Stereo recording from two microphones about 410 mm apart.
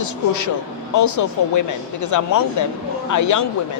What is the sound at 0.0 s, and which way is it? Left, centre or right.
A man's voice, left.